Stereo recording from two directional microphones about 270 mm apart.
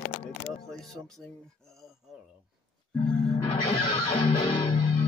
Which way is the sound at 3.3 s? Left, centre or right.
Centre.